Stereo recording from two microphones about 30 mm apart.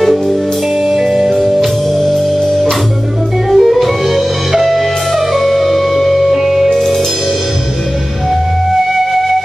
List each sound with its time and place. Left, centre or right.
0.8 s music: centre
3.4 s music: centre
6.7 s music: centre